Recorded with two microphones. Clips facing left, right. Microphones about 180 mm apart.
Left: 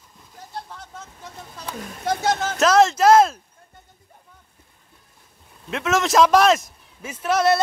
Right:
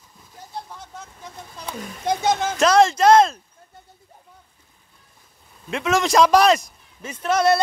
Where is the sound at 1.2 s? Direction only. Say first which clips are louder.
Even; 15° right (ahead or behind).